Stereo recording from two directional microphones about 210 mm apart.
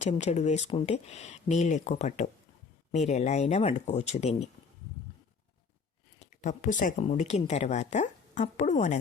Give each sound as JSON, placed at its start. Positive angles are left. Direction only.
{"t": 0.0, "sound": "speech", "side_deg": 30}
{"t": 6.1, "sound": "speech", "side_deg": 35}